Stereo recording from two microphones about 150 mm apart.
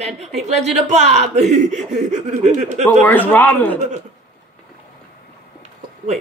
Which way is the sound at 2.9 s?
10° left (ahead or behind).